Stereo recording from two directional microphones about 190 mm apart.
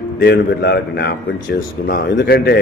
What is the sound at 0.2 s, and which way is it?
A man's voice, 60° left (ahead or behind).